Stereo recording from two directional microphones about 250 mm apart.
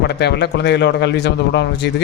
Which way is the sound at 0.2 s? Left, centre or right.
Left.